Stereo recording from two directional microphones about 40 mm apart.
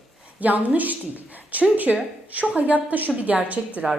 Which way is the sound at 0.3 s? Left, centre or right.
Right.